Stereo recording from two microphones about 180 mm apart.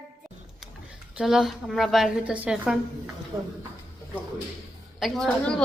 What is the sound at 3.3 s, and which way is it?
Speech, 20° right (ahead or behind).